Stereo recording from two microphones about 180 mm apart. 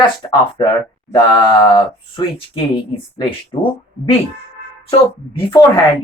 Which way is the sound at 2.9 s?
30° left (ahead or behind).